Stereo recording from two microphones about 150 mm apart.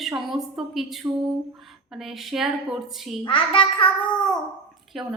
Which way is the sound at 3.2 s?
35° left (ahead or behind).